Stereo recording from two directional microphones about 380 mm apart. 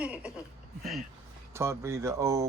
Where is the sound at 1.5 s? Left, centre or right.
Centre.